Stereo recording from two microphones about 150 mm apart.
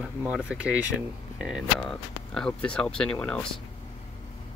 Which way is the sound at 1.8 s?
5° left (ahead or behind).